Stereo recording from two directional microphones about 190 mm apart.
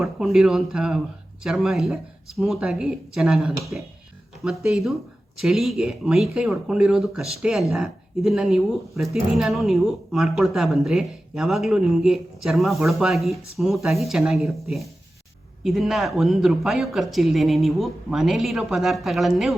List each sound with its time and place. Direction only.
0.0 s a woman's voice: centre (ahead or behind)